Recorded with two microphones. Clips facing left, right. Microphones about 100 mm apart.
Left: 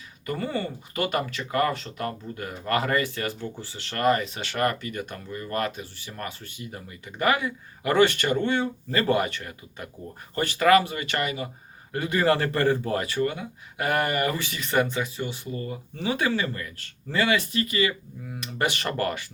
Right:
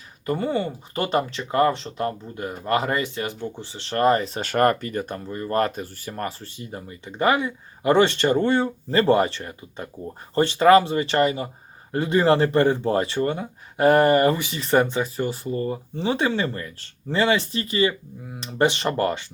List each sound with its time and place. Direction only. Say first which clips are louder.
0.3 s speech: right 5 dB; 25° right (ahead or behind)
14.3 s speech: right 3 dB; 20° right (ahead or behind)
14.6 s speech: right 4 dB; 35° right (ahead or behind)